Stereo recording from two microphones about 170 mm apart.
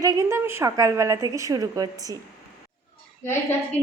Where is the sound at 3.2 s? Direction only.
15° left (ahead or behind).